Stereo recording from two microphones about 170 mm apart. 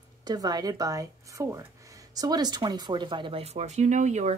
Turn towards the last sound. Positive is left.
turn(degrees=-45)  # may be behind; listen again after turning